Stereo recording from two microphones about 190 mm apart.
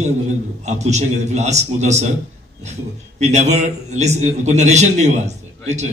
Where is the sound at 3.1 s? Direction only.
35° right (ahead or behind).